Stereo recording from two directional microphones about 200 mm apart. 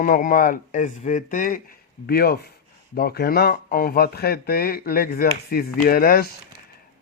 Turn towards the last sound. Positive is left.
turn(degrees=50)  # may be behind; listen again after turning